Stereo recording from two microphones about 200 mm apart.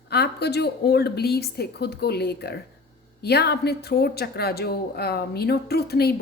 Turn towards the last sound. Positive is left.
turn(degrees=50)  # may be behind; listen again after turning